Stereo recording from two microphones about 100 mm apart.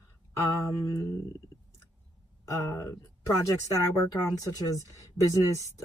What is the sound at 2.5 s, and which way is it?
Speech, 25° left (ahead or behind).